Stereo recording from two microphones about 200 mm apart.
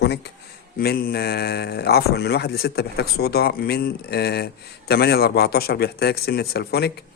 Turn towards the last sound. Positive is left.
turn(degrees=55)  # may be behind; listen again after turning